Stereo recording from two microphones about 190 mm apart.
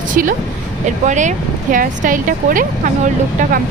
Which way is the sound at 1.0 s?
40° right (ahead or behind).